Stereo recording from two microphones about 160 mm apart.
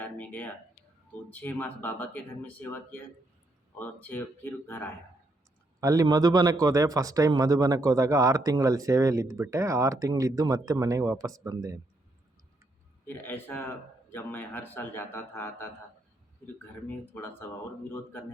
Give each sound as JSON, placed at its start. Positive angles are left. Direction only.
{"t": 0.0, "sound": "speech", "side_deg": 10}
{"t": 5.8, "sound": "a man's voice", "side_deg": -20}
{"t": 13.1, "sound": "speech", "side_deg": 10}
{"t": 16.8, "sound": "speech", "side_deg": 15}